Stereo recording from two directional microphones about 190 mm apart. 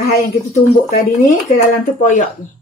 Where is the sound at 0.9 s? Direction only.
50° left (ahead or behind).